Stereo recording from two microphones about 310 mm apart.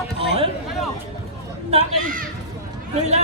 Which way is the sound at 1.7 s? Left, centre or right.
Right.